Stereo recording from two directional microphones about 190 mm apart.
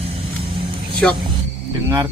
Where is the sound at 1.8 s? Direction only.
20° right (ahead or behind).